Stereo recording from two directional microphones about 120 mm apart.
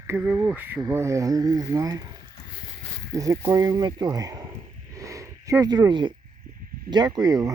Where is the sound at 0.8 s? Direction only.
25° right (ahead or behind).